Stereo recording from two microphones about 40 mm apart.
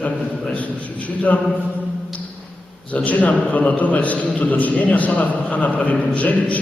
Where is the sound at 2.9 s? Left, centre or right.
Left.